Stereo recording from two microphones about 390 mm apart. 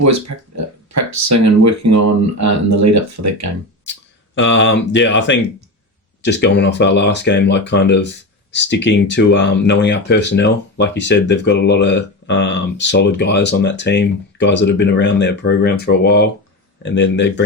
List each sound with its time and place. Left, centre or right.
0.0 s speech: right
4.4 s speech: left